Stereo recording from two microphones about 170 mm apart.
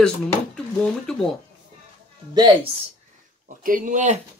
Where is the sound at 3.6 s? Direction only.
50° right (ahead or behind).